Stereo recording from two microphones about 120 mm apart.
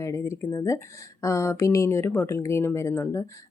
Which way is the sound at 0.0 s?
25° left (ahead or behind).